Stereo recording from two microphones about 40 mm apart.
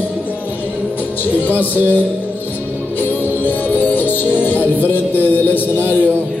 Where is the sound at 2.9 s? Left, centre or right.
Left.